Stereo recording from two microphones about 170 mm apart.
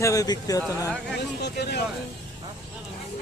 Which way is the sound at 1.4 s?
75° left (ahead or behind).